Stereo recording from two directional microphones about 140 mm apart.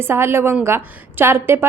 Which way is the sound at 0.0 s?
15° right (ahead or behind).